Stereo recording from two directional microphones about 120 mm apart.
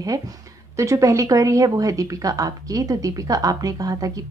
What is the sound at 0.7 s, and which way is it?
Speech, 25° right (ahead or behind).